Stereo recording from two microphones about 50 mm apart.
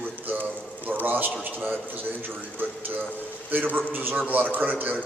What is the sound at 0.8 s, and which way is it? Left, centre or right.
A man's voice, right.